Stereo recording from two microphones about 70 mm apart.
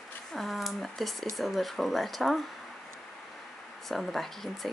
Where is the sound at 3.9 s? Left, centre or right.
Centre.